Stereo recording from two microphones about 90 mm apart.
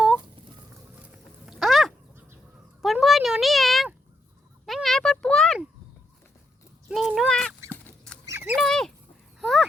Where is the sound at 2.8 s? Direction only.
Centre (ahead or behind).